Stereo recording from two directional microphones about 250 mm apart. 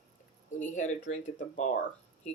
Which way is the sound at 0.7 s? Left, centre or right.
Left.